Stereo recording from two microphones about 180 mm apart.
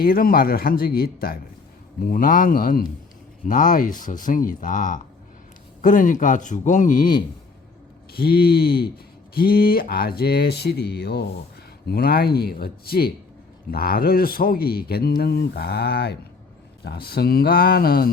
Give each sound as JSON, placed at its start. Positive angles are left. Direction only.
{"t": 0.0, "sound": "speech", "side_deg": 55}
{"t": 8.1, "sound": "speech", "side_deg": 60}